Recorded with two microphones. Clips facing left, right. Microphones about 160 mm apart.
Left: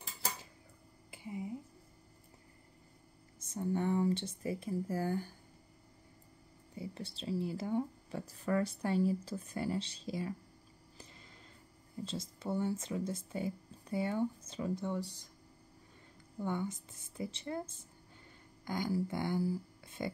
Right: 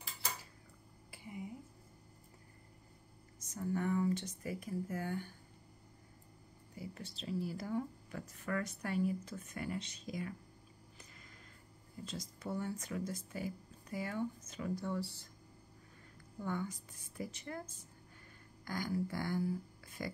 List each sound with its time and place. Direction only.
1.1 s a sound: 25° left (ahead or behind)
3.3 s speech: 30° left (ahead or behind)
6.7 s speech: 30° left (ahead or behind)
12.0 s speech: 30° left (ahead or behind)
16.3 s speech: 25° left (ahead or behind)